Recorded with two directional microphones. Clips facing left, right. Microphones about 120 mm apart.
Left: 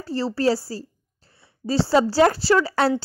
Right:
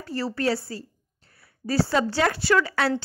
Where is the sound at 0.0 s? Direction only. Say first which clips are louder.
Left 4 dB; 30° left (ahead or behind).